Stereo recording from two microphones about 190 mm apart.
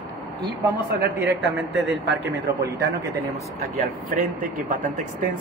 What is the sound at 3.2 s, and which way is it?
Speech, 55° right (ahead or behind).